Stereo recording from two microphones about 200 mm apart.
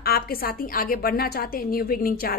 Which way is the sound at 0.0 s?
50° left (ahead or behind).